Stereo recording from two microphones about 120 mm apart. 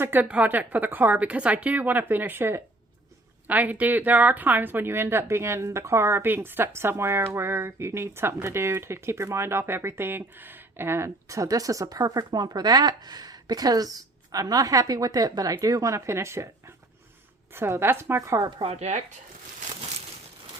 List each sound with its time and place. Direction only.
0.0 s speech: 15° right (ahead or behind); by 18.7 s 35° right (ahead or behind)
18.7 s speech: 70° right (ahead or behind)